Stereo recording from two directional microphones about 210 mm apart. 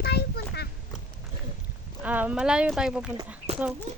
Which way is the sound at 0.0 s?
50° left (ahead or behind).